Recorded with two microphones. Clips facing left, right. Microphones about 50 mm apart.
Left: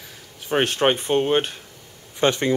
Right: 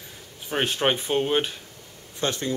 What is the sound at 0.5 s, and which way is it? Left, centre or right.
Speech, left.